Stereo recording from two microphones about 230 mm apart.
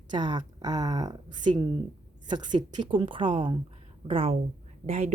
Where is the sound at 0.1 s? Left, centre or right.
Centre.